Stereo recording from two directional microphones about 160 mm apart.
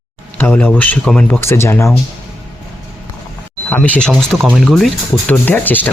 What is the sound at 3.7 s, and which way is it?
Speech, 10° left (ahead or behind).